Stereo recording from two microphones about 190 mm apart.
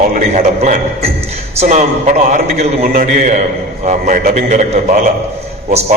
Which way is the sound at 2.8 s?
50° right (ahead or behind).